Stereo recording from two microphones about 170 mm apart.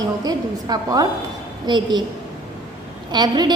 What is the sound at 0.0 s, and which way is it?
A woman's voice, 20° right (ahead or behind).